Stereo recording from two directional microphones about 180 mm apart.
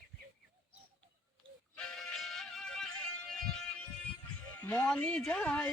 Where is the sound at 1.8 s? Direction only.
5° left (ahead or behind).